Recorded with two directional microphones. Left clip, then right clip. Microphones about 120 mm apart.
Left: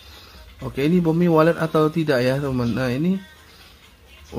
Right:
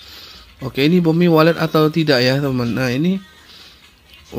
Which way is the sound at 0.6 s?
20° right (ahead or behind).